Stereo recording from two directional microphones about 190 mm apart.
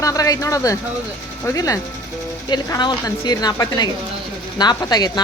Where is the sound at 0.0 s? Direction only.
20° left (ahead or behind).